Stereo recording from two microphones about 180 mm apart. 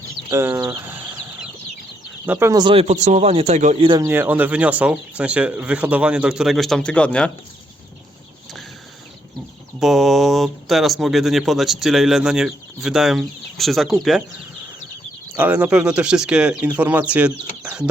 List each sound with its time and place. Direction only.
0.3 s speech: 15° right (ahead or behind)
2.2 s speech: 10° right (ahead or behind); by 3.8 s 40° right (ahead or behind)
3.8 s speech: 25° right (ahead or behind)
4.1 s speech: 10° right (ahead or behind); by 7.3 s 5° left (ahead or behind)
9.8 s speech: centre (ahead or behind)
15.4 s speech: 10° right (ahead or behind)